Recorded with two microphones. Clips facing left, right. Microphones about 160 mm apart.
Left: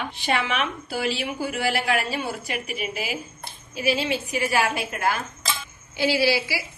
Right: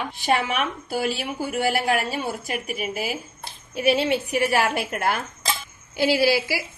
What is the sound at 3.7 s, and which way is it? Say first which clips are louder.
A woman's voice: right 4 dB; 65° right (ahead or behind).